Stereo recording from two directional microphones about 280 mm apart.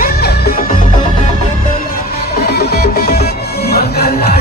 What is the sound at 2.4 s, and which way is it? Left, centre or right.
Music, left.